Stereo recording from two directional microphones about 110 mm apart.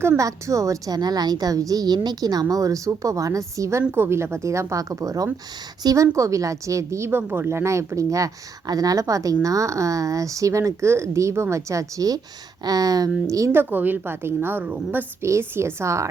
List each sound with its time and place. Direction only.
0.2 s a woman's voice: 30° right (ahead or behind)
13.5 s a woman's voice: 15° right (ahead or behind)